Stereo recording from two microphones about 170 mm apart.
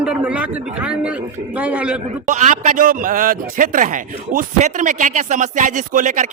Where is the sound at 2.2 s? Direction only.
50° right (ahead or behind).